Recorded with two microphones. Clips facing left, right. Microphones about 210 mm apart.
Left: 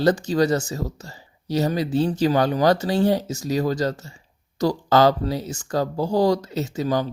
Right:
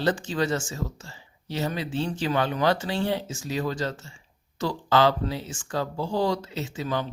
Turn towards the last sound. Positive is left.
turn(degrees=40)  # may be behind; listen again after turning